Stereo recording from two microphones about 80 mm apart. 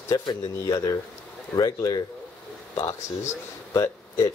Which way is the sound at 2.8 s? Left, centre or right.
Left.